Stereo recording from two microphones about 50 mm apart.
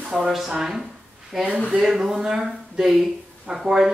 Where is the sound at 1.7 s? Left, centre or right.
Centre.